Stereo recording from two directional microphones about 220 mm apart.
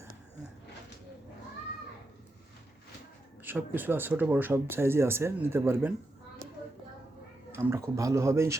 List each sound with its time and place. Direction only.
3.4 s speech: 10° right (ahead or behind)
7.5 s speech: 10° right (ahead or behind)